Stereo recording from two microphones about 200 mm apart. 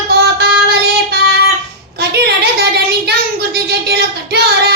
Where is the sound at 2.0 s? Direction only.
55° right (ahead or behind).